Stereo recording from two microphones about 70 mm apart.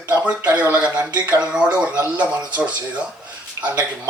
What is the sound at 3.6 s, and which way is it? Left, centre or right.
Speech, right.